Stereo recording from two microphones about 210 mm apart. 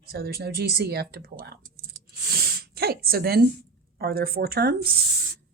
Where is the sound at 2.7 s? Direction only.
50° right (ahead or behind).